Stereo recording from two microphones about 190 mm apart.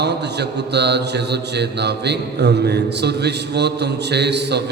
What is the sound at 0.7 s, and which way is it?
A man's voice, 60° right (ahead or behind).